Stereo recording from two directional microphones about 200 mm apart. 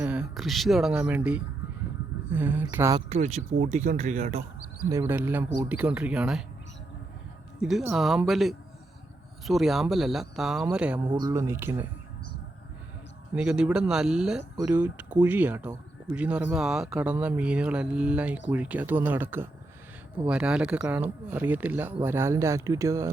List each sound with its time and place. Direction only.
0.0 s speech: 5° right (ahead or behind)
3.1 s speech: 35° right (ahead or behind)
4.9 s speech: 15° right (ahead or behind)
7.6 s speech: centre (ahead or behind)
11.1 s speech: 20° right (ahead or behind)
13.3 s speech: 5° right (ahead or behind)